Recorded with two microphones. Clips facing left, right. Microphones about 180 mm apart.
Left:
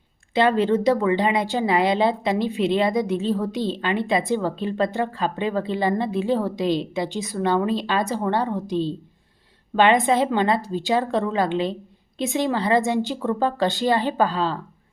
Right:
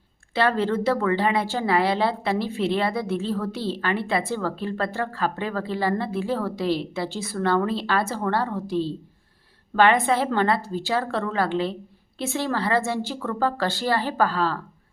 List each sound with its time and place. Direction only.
0.3 s a woman's voice: 20° left (ahead or behind)